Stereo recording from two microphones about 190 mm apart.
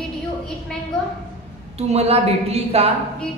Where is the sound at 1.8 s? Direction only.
35° right (ahead or behind).